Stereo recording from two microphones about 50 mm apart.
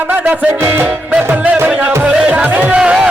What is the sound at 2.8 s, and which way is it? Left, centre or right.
Music, right.